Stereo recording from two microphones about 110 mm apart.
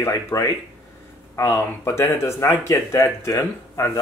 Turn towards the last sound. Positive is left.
turn(degrees=25)  # may be behind; listen again after turning